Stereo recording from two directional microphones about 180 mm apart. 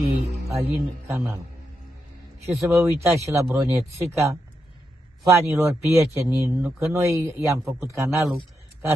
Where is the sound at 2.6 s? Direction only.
15° right (ahead or behind).